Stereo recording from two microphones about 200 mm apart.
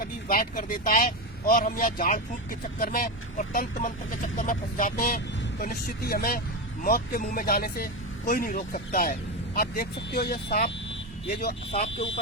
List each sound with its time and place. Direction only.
0.0 s speech: 45° left (ahead or behind)